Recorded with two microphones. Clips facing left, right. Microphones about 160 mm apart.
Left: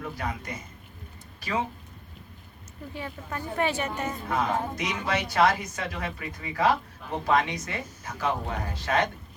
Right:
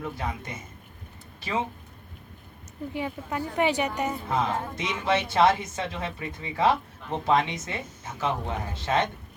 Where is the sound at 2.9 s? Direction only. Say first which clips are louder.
Right 4 dB; 15° right (ahead or behind).